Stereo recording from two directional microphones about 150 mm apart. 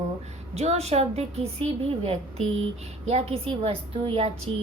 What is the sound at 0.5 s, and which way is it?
A woman's voice, 45° right (ahead or behind).